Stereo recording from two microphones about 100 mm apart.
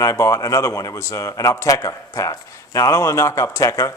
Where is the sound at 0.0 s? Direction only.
30° left (ahead or behind).